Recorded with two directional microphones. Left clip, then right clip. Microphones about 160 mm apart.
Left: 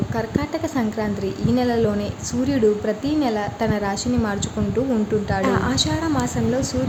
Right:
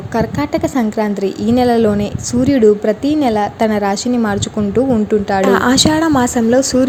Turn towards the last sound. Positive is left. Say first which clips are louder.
# right 10 dB
turn(degrees=-50)  # may be behind; listen again after turning